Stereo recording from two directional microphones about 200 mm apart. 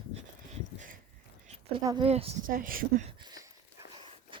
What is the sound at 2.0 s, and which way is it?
Speech, 30° right (ahead or behind).